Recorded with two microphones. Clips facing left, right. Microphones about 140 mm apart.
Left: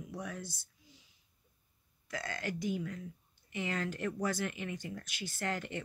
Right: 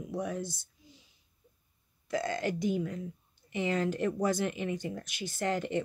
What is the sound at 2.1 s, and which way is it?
Speech, 20° right (ahead or behind).